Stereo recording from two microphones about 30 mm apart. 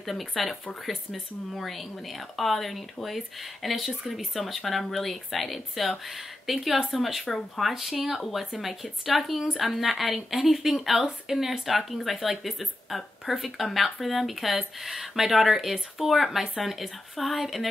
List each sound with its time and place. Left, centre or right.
0.0 s speech: centre
7.2 s speech: centre